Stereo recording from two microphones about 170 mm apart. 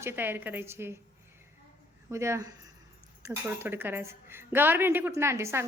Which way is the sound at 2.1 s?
15° right (ahead or behind).